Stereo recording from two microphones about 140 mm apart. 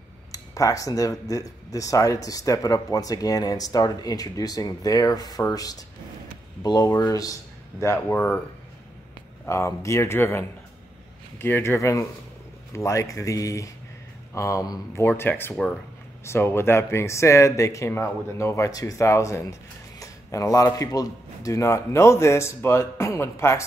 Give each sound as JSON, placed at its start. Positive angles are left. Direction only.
{"t": 0.3, "sound": "speech", "side_deg": 25}
{"t": 9.5, "sound": "speech", "side_deg": 20}